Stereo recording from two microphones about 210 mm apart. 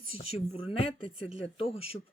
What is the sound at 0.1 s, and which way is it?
Speech, 30° left (ahead or behind).